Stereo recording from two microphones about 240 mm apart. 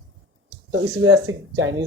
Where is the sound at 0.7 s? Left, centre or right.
Right.